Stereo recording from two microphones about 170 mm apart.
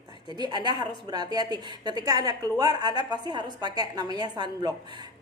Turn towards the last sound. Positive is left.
turn(degrees=-25)  # may be behind; listen again after turning